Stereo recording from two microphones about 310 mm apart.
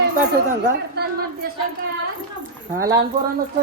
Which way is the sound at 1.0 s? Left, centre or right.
Right.